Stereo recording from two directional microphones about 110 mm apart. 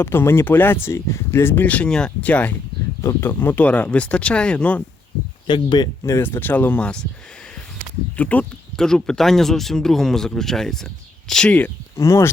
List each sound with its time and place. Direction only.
0.0 s speech: 20° left (ahead or behind)
3.0 s speech: 25° left (ahead or behind)
5.5 s speech: 45° left (ahead or behind)
6.1 s speech: 20° left (ahead or behind)
8.1 s speech: 15° left (ahead or behind)
11.9 s speech: 25° left (ahead or behind)